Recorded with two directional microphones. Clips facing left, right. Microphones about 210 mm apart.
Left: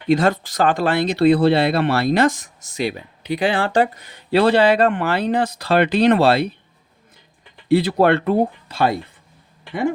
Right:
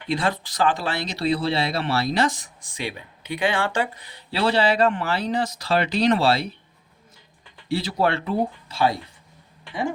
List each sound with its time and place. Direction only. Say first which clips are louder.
0.1 s speech: left 8 dB; 45° left (ahead or behind)
7.9 s speech: left 7 dB; 60° left (ahead or behind)